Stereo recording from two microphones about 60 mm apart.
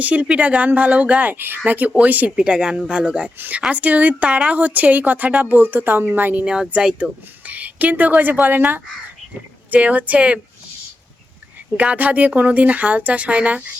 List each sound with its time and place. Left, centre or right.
0.0 s speech: right
3.3 s speech: right
3.7 s speech: right
6.4 s speech: centre
11.8 s speech: right